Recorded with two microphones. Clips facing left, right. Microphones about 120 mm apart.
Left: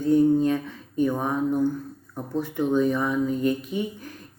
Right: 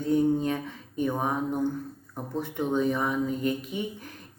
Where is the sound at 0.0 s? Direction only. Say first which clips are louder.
Left 5 dB; 20° right (ahead or behind).